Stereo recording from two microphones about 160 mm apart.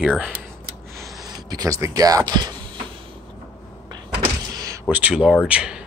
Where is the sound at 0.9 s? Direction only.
25° right (ahead or behind).